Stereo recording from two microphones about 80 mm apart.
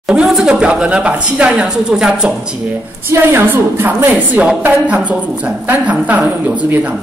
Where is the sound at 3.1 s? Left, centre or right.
Right.